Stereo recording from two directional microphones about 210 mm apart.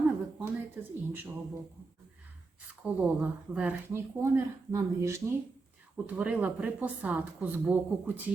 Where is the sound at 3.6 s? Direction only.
10° right (ahead or behind).